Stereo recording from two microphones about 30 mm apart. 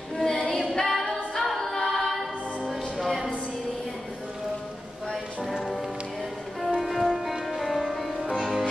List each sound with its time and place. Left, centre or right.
0.2 s female singing: centre
0.7 s singing: centre
1.4 s a capella: centre
1.9 s music: centre
6.8 s music: centre
7.4 s music: centre